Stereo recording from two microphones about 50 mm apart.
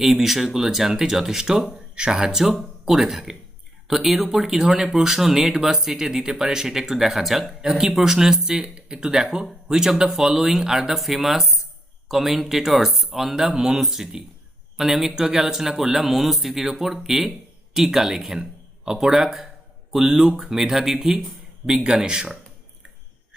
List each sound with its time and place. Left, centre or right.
0.0 s speech: centre